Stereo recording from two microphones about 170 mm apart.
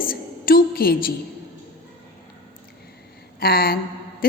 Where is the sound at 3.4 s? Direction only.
60° left (ahead or behind).